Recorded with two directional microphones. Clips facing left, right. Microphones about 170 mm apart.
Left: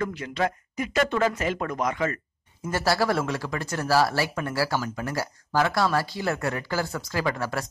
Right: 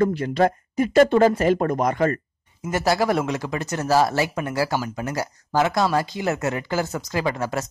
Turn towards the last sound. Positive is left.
turn(degrees=-20)  # may be behind; listen again after turning